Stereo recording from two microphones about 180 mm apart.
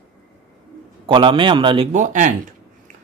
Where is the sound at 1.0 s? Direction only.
30° right (ahead or behind).